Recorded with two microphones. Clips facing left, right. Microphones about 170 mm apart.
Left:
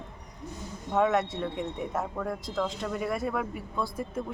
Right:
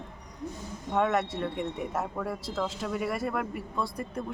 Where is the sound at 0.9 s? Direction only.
Centre (ahead or behind).